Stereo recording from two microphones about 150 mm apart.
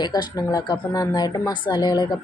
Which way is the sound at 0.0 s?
25° left (ahead or behind).